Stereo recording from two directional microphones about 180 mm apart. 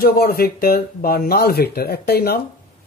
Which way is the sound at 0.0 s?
55° left (ahead or behind).